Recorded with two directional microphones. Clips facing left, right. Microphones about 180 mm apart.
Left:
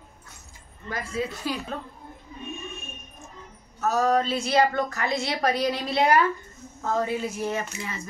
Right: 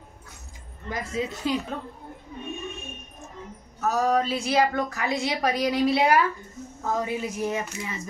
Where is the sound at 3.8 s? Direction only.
10° right (ahead or behind).